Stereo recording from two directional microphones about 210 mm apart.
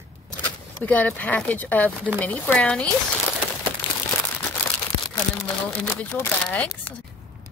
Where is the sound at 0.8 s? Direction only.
10° left (ahead or behind).